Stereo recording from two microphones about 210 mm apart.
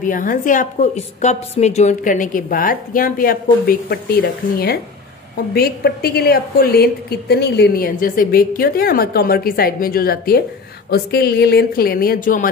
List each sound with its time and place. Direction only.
0.0 s a woman's voice: 40° left (ahead or behind)